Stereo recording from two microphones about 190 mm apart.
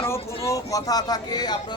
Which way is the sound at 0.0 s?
15° left (ahead or behind).